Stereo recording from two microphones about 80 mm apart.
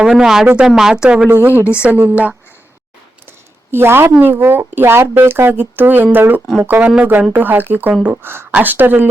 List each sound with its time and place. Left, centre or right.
0.0 s speech: centre
1.4 s speech: right
3.7 s a woman's voice: right